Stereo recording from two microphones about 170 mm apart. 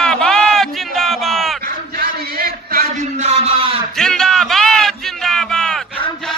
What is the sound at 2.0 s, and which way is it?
Chant, 65° right (ahead or behind).